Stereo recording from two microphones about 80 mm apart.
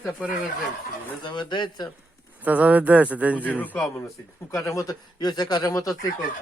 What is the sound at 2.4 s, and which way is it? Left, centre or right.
Speech, centre.